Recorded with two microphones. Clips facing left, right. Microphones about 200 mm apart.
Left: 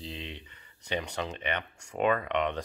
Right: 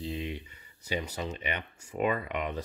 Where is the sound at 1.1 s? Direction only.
70° left (ahead or behind).